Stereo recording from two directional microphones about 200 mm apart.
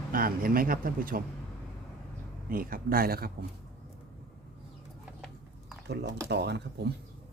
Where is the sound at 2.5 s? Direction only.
45° right (ahead or behind).